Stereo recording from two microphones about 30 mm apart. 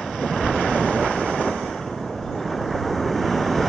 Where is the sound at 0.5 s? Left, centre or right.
Left.